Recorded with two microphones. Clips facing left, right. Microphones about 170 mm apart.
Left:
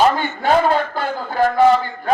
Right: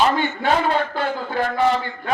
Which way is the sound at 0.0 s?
40° left (ahead or behind).